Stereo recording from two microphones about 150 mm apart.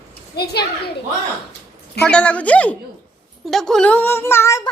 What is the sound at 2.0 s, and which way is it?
A woman's voice, 5° left (ahead or behind).